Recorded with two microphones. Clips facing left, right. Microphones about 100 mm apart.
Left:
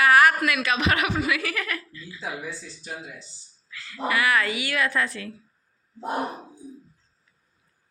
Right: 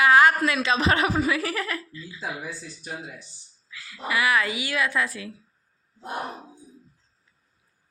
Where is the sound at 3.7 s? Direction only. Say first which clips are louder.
Left 2 dB; 15° right (ahead or behind).